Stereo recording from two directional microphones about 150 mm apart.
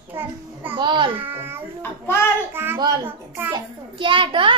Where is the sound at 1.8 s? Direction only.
15° left (ahead or behind).